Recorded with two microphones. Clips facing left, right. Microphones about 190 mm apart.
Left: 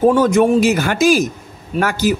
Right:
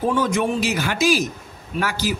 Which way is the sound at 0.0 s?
45° left (ahead or behind).